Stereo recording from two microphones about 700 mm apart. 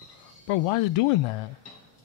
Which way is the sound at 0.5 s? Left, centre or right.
Left.